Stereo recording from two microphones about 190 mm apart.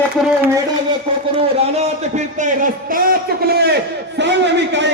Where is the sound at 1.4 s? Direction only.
35° right (ahead or behind).